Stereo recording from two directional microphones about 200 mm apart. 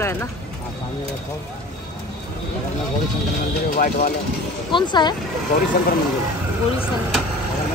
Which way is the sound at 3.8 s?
45° left (ahead or behind).